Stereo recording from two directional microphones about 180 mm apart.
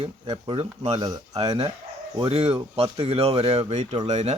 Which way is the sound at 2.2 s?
35° right (ahead or behind).